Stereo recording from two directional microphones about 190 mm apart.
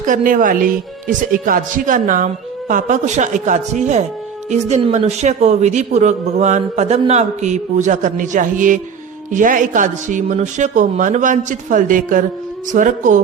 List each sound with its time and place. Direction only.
0.0 s a man's voice: 45° right (ahead or behind)